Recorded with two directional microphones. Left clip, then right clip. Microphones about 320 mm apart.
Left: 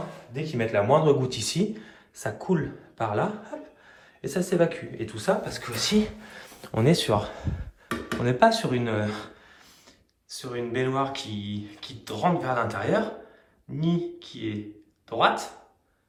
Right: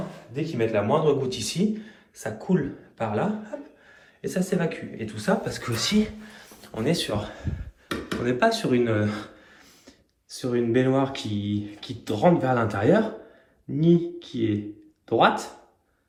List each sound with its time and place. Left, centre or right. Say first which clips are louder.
0.3 s a man's voice: right 1 dB; centre
6.3 s speech: left 4 dB; left; by 14.6 s centre